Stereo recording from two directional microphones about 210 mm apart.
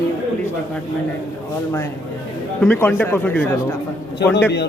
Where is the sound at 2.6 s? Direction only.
10° left (ahead or behind).